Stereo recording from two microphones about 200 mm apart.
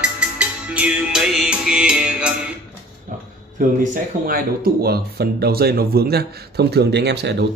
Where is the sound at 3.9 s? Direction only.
50° right (ahead or behind).